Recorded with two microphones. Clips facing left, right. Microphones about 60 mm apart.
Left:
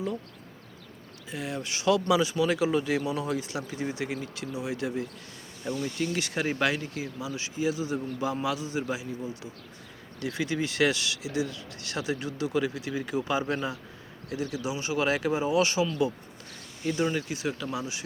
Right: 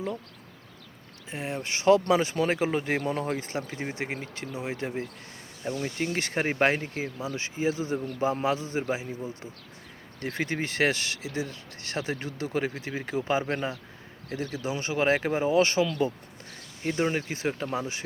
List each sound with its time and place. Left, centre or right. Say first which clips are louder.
1.3 s speech: right 1 dB; right